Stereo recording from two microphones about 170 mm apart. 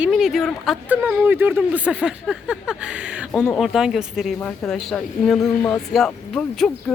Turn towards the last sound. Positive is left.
turn(degrees=5)  # may be behind; listen again after turning